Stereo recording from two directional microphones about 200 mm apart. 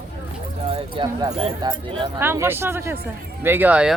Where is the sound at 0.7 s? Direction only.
25° right (ahead or behind).